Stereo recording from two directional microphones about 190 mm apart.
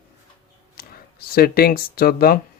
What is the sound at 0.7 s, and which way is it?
Speech, 50° left (ahead or behind).